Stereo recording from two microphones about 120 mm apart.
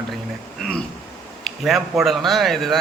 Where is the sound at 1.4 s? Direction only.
Centre (ahead or behind).